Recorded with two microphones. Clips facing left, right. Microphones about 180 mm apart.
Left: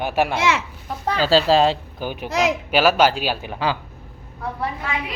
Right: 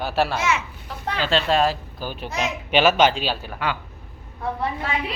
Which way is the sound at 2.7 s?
5° left (ahead or behind).